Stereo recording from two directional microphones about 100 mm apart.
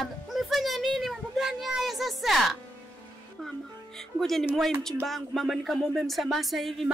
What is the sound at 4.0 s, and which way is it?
A woman's voice, 5° left (ahead or behind).